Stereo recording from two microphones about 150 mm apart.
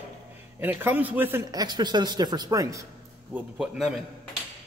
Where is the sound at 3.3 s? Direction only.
5° right (ahead or behind).